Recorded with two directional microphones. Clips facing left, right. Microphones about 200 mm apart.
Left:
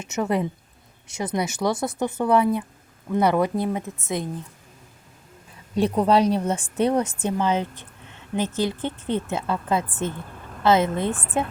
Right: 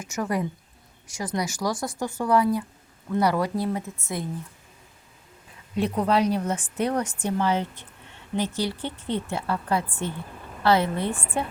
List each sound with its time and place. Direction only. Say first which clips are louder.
0.0 s speech: left 3 dB; 25° left (ahead or behind)
5.7 s speech: left 4 dB; 30° left (ahead or behind)
9.0 s speech: left 2 dB; 15° right (ahead or behind)
9.3 s speech: even; 20° left (ahead or behind)